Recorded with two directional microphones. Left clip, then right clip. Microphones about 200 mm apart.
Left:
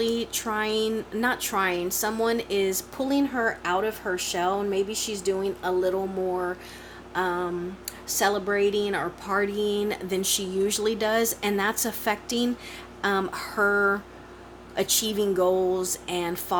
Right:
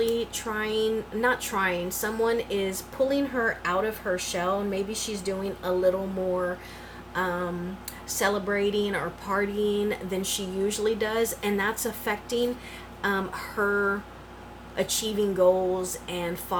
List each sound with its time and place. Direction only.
0.0 s speech: 50° left (ahead or behind)
7.1 s a sound: 45° left (ahead or behind)
8.0 s speech: 45° left (ahead or behind)